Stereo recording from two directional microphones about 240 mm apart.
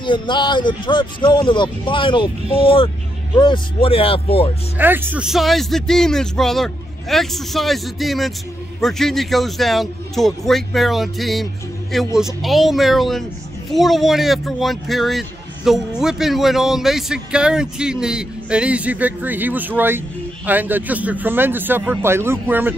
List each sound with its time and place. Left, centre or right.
0.0 s speech: centre
4.7 s a man's voice: centre